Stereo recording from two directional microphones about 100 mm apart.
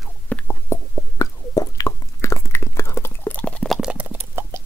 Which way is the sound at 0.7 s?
35° left (ahead or behind).